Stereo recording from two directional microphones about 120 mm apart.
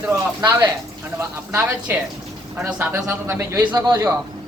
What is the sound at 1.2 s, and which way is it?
Speech, 15° right (ahead or behind).